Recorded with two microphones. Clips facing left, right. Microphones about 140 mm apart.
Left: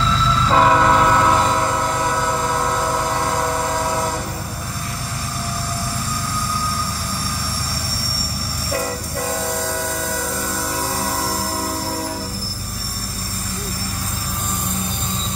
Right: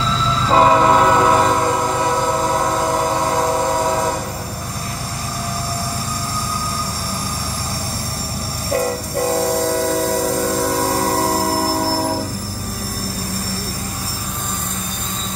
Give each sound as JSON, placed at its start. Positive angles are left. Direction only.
{"t": 0.5, "sound": "train", "side_deg": -20}
{"t": 8.7, "sound": "train", "side_deg": -35}
{"t": 11.9, "sound": "train", "side_deg": -35}